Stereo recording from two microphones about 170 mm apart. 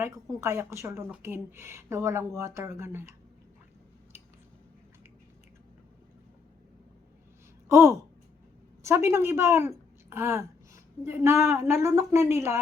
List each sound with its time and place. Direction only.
0.0 s a woman's voice: 15° right (ahead or behind)
7.7 s a woman's voice: 15° right (ahead or behind)